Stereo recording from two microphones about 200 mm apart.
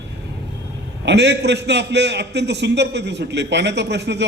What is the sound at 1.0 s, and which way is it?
A man's voice, 60° right (ahead or behind).